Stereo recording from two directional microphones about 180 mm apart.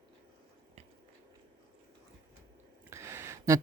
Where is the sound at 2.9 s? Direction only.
15° right (ahead or behind).